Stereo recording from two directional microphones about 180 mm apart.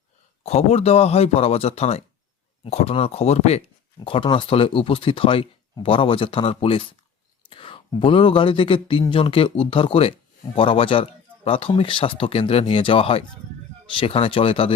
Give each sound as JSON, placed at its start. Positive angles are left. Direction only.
{"t": 0.4, "sound": "speech", "side_deg": 35}